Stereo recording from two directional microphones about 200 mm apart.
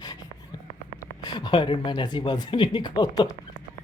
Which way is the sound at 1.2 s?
20° left (ahead or behind).